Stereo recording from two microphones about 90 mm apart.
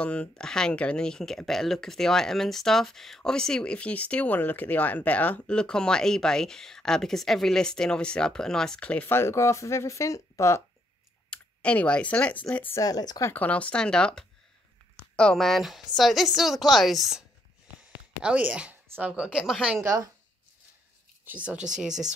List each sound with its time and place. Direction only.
0.0 s speech: 15° left (ahead or behind)
9.1 s speech: 30° left (ahead or behind)
11.2 s speech: 15° left (ahead or behind)
12.7 s speech: 45° left (ahead or behind)
13.3 s a woman's voice: 15° left (ahead or behind); by 17.2 s centre (ahead or behind)
18.2 s speech: 15° right (ahead or behind)
19.2 s a woman's voice: centre (ahead or behind)
19.8 s a woman's voice: 30° right (ahead or behind)
21.3 s speech: 15° right (ahead or behind)